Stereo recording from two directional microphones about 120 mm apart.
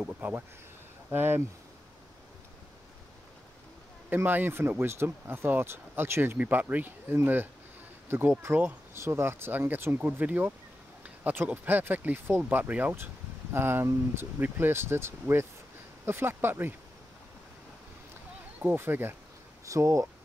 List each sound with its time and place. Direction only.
0.0 s speech: 15° right (ahead or behind)
4.1 s speech: 15° right (ahead or behind)
18.6 s speech: 15° right (ahead or behind)